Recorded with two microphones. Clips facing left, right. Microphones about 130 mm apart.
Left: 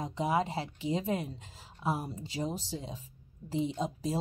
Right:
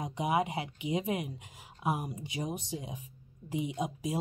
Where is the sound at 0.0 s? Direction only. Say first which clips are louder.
Even; 15° right (ahead or behind).